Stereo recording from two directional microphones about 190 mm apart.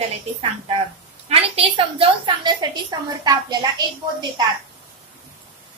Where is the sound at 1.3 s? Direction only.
30° right (ahead or behind).